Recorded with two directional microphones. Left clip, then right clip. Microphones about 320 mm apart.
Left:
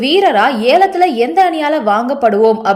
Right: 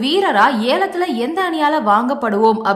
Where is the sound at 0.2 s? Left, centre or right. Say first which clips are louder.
Left 1 dB; centre.